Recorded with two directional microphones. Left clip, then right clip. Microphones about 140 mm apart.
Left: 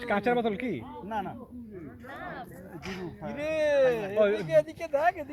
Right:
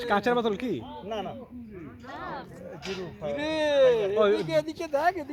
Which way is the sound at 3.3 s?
40° right (ahead or behind).